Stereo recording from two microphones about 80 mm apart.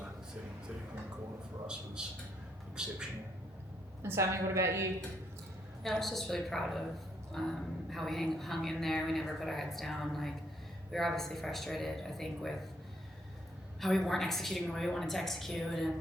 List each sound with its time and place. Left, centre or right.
1.6 s a man's voice: centre
4.0 s a woman's voice: right
5.8 s a woman's voice: centre
13.8 s a woman's voice: centre